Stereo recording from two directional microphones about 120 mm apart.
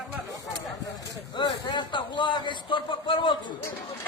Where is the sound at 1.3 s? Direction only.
40° left (ahead or behind).